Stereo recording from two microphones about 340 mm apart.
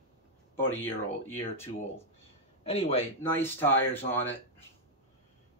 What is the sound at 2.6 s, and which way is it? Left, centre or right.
Speech, centre.